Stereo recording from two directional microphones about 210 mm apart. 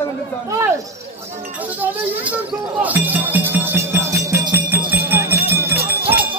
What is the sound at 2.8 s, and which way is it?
Music, 10° right (ahead or behind).